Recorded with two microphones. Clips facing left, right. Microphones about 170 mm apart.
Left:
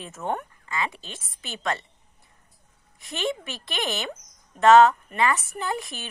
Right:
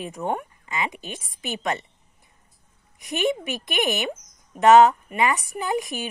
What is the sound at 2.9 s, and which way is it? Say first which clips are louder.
A woman's voice: right 5 dB; 15° right (ahead or behind).